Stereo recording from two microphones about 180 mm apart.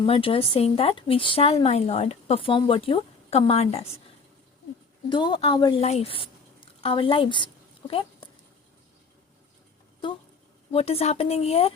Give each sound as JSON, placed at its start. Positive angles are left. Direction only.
{"t": 0.0, "sound": "speech", "side_deg": 30}
{"t": 5.0, "sound": "a woman's voice", "side_deg": 25}
{"t": 5.8, "sound": "a sound", "side_deg": 35}
{"t": 10.7, "sound": "speech", "side_deg": 35}